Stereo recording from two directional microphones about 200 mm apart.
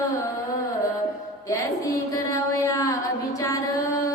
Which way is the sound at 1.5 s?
15° left (ahead or behind).